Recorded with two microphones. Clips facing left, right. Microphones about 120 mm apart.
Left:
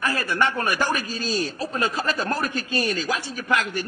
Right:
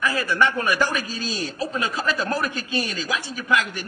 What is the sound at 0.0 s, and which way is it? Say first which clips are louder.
A man's voice: right 2 dB; 45° left (ahead or behind).